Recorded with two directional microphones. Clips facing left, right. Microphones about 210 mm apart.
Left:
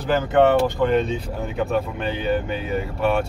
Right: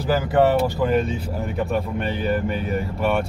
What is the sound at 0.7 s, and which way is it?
Speech, 5° right (ahead or behind).